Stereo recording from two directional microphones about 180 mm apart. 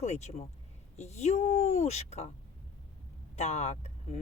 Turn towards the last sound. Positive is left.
turn(degrees=40)  # may be behind; listen again after turning